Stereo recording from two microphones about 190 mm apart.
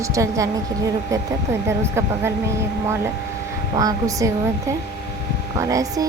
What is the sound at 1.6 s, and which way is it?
Speech, 15° right (ahead or behind).